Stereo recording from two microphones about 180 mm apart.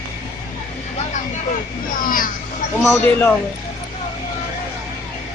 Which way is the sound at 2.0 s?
50° left (ahead or behind).